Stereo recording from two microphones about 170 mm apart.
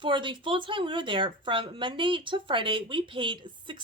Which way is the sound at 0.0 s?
30° right (ahead or behind).